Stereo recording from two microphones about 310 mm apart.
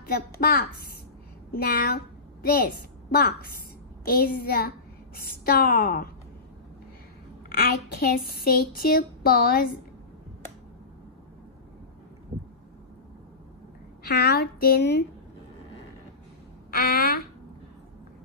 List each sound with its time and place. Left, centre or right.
0.0 s a woman's voice: left
3.1 s a woman's voice: left
7.4 s a woman's voice: left
14.0 s a woman's voice: left
16.7 s speech: left